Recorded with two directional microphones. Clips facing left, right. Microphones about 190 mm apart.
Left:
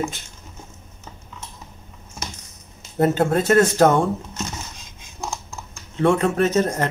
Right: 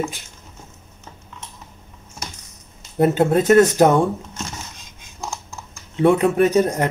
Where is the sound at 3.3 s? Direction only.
15° right (ahead or behind).